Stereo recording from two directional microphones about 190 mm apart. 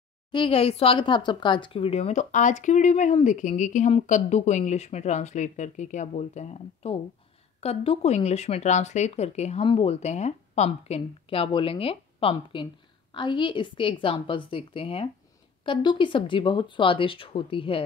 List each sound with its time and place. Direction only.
0.3 s speech: 25° left (ahead or behind)